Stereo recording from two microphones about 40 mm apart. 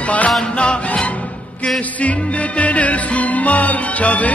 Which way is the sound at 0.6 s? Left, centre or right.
Left.